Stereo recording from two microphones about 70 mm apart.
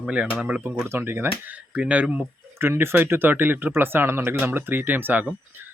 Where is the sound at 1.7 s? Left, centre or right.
Centre.